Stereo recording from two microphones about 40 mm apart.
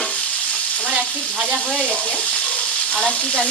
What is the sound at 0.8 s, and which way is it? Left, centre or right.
Frying, right.